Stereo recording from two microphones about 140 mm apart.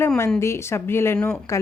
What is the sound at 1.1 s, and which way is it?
Speech, 5° left (ahead or behind).